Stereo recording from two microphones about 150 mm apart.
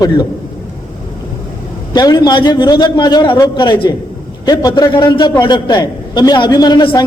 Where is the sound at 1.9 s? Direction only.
30° left (ahead or behind).